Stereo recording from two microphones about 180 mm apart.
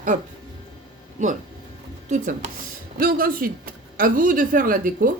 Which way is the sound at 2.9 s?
55° right (ahead or behind).